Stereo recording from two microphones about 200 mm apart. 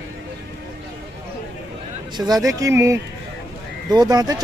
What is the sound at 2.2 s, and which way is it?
A man's voice, 20° right (ahead or behind).